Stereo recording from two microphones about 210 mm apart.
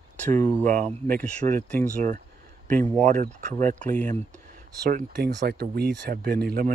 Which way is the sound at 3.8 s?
5° left (ahead or behind).